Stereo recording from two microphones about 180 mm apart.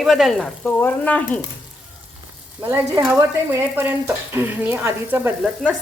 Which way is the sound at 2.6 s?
15° right (ahead or behind).